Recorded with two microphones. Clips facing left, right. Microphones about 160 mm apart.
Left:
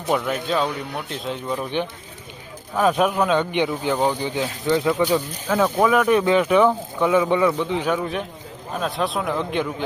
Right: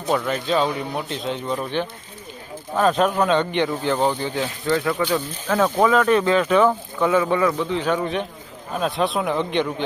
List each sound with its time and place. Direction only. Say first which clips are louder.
0.1 s speech: right 1 dB; 5° left (ahead or behind)
2.7 s speech: even; 10° left (ahead or behind)